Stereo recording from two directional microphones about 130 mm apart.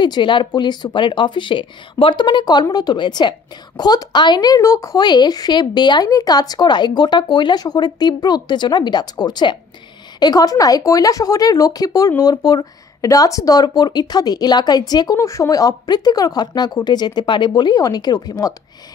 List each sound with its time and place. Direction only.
0.0 s speech: 35° left (ahead or behind)